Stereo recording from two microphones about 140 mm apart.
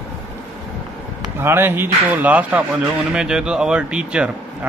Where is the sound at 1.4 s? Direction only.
15° right (ahead or behind).